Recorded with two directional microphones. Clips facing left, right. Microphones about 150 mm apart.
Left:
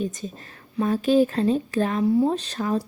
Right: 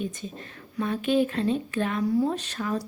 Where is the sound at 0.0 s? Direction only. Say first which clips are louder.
Left 4 dB; 40° left (ahead or behind).